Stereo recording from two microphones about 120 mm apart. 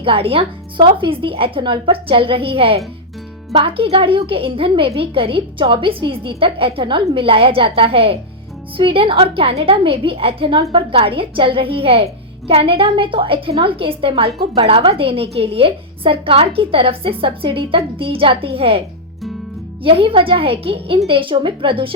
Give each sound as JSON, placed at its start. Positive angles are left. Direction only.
{"t": 0.0, "sound": "a woman's voice", "side_deg": -50}
{"t": 19.8, "sound": "a woman's voice", "side_deg": -50}